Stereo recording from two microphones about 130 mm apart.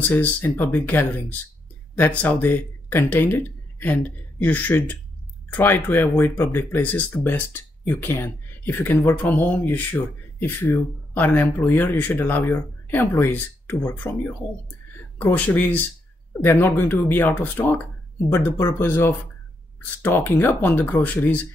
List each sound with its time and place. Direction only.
0.1 s speech: 15° left (ahead or behind)
15.3 s speech: 10° left (ahead or behind)